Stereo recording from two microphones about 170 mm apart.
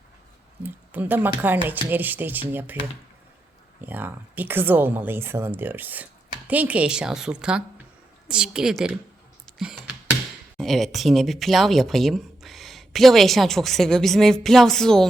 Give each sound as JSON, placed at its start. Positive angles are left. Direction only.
{"t": 0.6, "sound": "speech", "side_deg": -10}
{"t": 3.8, "sound": "speech", "side_deg": -10}
{"t": 9.6, "sound": "computer keyboard", "side_deg": -5}
{"t": 10.6, "sound": "speech", "side_deg": 0}